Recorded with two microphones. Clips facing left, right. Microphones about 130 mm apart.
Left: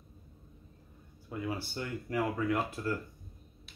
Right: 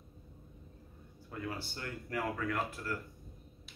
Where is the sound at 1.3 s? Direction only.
15° left (ahead or behind).